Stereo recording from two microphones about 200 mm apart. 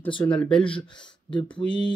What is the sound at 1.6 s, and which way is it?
Speech, 5° left (ahead or behind).